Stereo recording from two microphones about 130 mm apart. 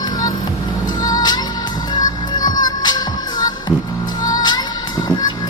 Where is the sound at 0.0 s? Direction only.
30° left (ahead or behind).